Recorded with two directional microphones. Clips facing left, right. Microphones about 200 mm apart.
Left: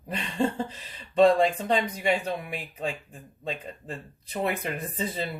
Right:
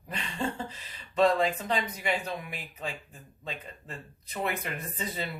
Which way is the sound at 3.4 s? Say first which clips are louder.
Left 6 dB; 30° left (ahead or behind).